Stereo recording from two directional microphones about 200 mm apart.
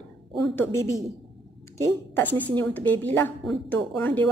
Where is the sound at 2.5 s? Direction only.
10° left (ahead or behind).